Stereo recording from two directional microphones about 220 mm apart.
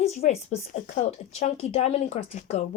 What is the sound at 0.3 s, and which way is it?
Speech, 30° left (ahead or behind).